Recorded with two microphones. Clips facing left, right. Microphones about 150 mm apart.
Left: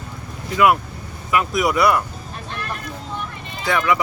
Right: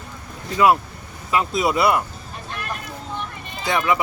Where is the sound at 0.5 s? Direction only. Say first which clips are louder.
Even; 25° right (ahead or behind).